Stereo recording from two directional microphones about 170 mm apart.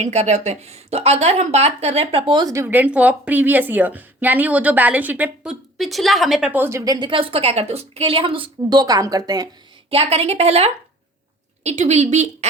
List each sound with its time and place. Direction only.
0.0 s a woman's voice: 40° right (ahead or behind); by 9.5 s 25° right (ahead or behind)
9.9 s a woman's voice: 35° right (ahead or behind)